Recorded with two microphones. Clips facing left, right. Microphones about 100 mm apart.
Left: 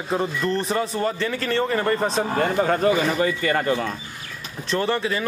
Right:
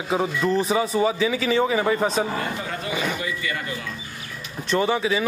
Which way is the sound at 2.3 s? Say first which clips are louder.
Left 8 dB; 50° left (ahead or behind).